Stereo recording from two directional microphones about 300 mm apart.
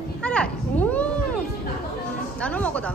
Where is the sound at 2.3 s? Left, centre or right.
Centre.